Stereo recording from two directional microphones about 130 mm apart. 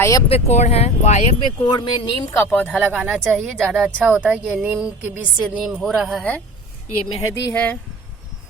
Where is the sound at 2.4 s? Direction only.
15° left (ahead or behind).